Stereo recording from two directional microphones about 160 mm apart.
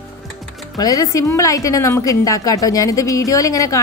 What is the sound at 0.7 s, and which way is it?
A woman's voice, 25° left (ahead or behind).